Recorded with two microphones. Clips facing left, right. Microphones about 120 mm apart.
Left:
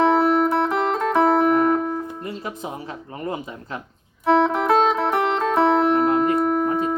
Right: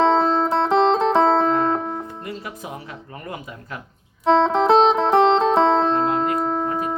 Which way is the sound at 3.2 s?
25° left (ahead or behind).